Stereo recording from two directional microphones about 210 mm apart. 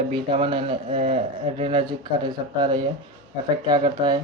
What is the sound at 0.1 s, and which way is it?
Speech, 25° right (ahead or behind).